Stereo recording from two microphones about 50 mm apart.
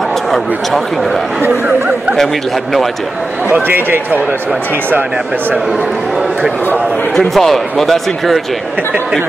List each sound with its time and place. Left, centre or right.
0.3 s a man's voice: centre
3.6 s speech: right
5.7 s a man's voice: centre